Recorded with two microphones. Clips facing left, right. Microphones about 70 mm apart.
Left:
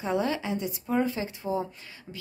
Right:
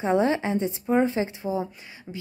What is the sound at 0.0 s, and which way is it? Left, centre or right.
A woman's voice, right.